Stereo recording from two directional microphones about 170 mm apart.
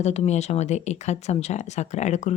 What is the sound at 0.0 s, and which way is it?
Speech, 40° left (ahead or behind).